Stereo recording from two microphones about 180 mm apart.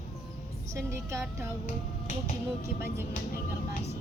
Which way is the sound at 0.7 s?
15° right (ahead or behind).